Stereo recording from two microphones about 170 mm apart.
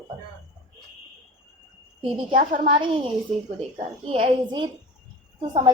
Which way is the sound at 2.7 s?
30° right (ahead or behind).